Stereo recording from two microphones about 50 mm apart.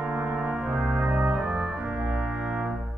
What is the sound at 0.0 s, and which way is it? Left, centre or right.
Brass instrument, right.